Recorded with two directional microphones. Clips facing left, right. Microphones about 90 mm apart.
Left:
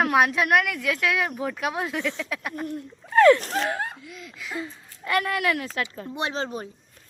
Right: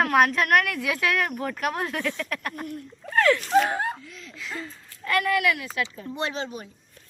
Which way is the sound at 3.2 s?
25° left (ahead or behind).